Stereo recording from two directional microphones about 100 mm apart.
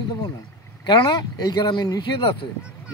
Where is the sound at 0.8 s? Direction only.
45° left (ahead or behind).